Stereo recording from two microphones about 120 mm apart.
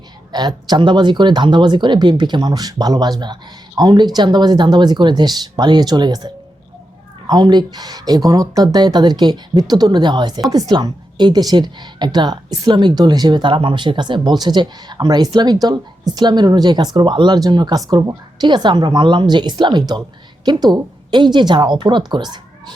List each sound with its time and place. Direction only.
0.3 s a woman's voice: 35° right (ahead or behind)